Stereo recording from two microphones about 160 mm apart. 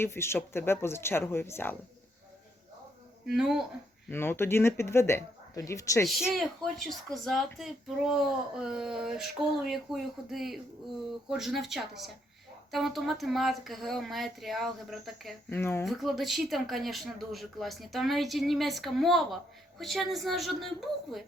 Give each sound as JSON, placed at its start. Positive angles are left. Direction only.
{"t": 0.0, "sound": "speech", "side_deg": 15}
{"t": 3.2, "sound": "speech", "side_deg": -5}
{"t": 4.1, "sound": "speech", "side_deg": 15}
{"t": 6.1, "sound": "speech", "side_deg": 0}
{"t": 15.4, "sound": "speech", "side_deg": 15}
{"t": 15.9, "sound": "speech", "side_deg": 0}